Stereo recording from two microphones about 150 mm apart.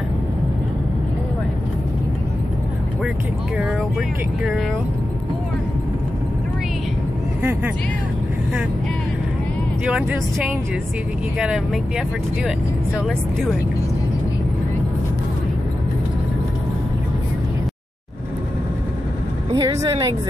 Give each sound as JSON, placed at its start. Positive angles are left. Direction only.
{"t": 9.8, "sound": "speech", "side_deg": -5}
{"t": 11.3, "sound": "speech", "side_deg": -5}
{"t": 19.5, "sound": "speech", "side_deg": -25}